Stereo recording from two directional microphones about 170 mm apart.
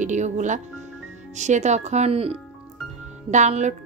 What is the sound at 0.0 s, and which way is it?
Speech, 45° right (ahead or behind).